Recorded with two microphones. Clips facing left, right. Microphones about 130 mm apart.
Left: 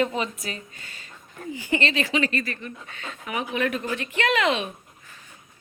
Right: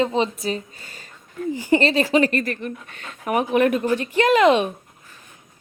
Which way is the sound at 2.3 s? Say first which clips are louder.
Right 6 dB; 55° right (ahead or behind).